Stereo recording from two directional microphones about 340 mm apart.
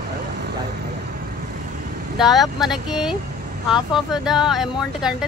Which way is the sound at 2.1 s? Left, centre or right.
Centre.